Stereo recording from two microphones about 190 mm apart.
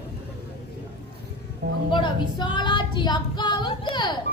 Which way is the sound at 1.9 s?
25° left (ahead or behind).